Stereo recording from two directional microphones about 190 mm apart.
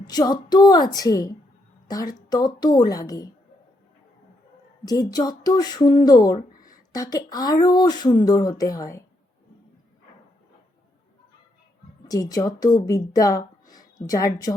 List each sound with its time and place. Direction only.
0.1 s a woman's voice: 20° left (ahead or behind)
4.9 s speech: 20° left (ahead or behind)
12.0 s a woman's voice: 20° left (ahead or behind)